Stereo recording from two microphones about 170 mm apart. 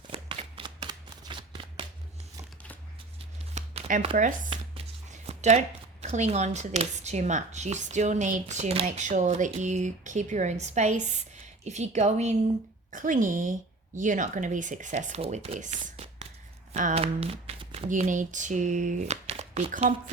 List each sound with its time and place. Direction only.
0.1 s shuffling cards: 35° right (ahead or behind)
3.5 s a sound: 45° right (ahead or behind)
4.4 s a woman's voice: 35° right (ahead or behind)
15.8 s whispering: 35° right (ahead or behind)
16.7 s speech: 40° right (ahead or behind)